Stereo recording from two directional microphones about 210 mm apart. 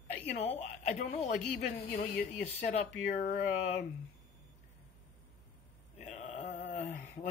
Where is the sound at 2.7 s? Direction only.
30° left (ahead or behind).